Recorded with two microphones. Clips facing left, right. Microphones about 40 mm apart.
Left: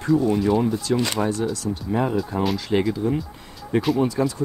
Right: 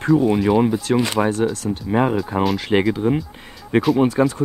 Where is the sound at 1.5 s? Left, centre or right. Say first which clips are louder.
Right 3 dB; right.